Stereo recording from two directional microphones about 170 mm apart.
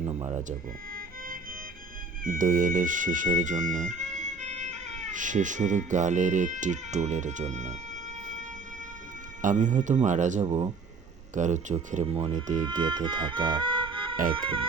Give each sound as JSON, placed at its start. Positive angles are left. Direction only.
{"t": 0.3, "sound": "speech", "side_deg": -45}
{"t": 2.2, "sound": "speech", "side_deg": -55}
{"t": 9.4, "sound": "speech", "side_deg": -50}
{"t": 12.6, "sound": "speech", "side_deg": -25}